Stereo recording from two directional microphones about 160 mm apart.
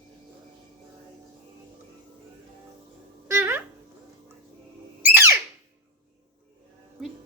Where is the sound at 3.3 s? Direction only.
15° right (ahead or behind).